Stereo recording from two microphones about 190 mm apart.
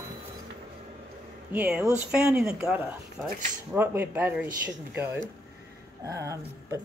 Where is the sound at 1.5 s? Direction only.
5° right (ahead or behind).